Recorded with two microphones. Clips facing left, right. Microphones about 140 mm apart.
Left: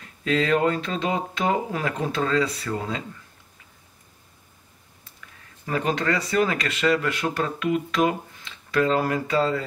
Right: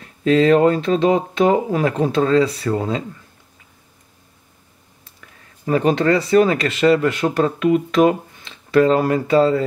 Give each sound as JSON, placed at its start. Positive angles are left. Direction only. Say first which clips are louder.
{"t": 0.2, "sound": "speech", "louder": "right 8 dB", "side_deg": -35}
{"t": 5.7, "sound": "speech", "louder": "right 8 dB", "side_deg": -25}